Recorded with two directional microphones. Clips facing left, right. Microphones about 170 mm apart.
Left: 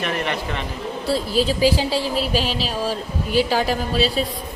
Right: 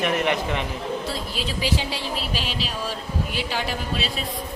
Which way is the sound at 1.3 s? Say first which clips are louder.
Left 9 dB; 35° left (ahead or behind).